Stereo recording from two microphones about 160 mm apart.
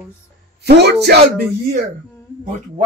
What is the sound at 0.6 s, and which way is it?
Speech, 90° right.